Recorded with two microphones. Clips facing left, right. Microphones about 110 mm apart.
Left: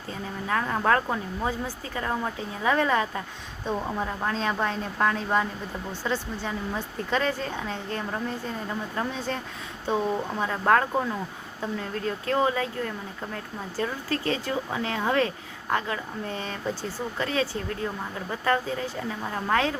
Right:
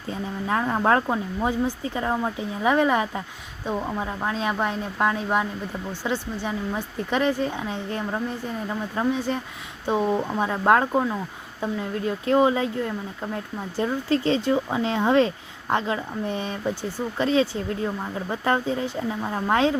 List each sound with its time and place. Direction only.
0.1 s speech: 20° right (ahead or behind)